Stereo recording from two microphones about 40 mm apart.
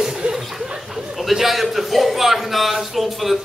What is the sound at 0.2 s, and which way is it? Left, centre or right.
Chuckle, right.